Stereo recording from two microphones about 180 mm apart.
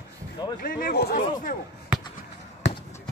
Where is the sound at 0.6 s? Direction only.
55° left (ahead or behind).